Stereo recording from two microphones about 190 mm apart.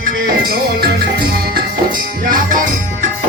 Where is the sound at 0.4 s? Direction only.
55° right (ahead or behind).